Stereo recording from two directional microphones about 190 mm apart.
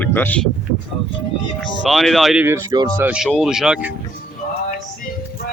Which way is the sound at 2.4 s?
20° right (ahead or behind).